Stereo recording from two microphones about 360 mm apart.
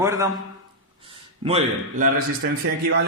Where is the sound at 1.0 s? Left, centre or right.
Centre.